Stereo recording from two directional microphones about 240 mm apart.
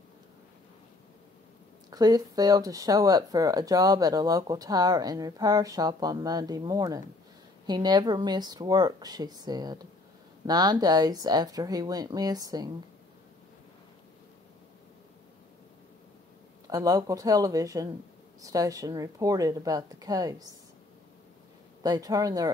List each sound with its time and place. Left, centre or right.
1.9 s speech: centre
16.6 s speech: centre
21.8 s speech: centre